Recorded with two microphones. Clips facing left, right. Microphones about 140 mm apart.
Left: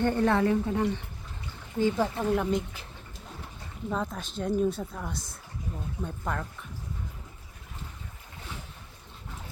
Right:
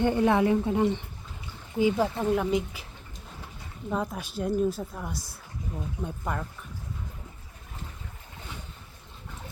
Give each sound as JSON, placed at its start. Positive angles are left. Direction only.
{"t": 0.0, "sound": "speech", "side_deg": -15}
{"t": 1.8, "sound": "speech", "side_deg": -10}
{"t": 3.8, "sound": "speech", "side_deg": -5}